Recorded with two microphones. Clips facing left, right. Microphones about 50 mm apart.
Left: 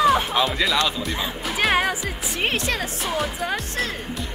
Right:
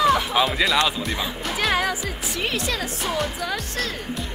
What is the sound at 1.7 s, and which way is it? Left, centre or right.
Music, left.